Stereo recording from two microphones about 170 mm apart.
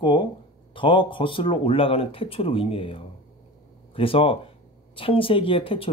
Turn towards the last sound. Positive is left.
turn(degrees=30)  # may be behind; listen again after turning